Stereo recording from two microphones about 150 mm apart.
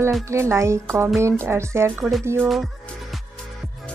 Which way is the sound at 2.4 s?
Centre (ahead or behind).